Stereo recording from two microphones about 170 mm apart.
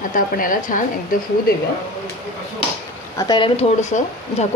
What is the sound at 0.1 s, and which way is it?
Speech, 50° left (ahead or behind).